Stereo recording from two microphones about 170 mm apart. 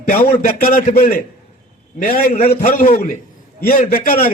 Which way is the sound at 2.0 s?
55° left (ahead or behind).